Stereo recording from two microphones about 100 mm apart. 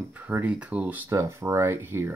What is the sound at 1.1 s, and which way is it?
Speech, 30° right (ahead or behind).